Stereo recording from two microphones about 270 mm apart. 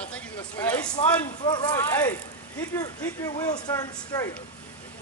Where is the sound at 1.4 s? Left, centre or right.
Centre.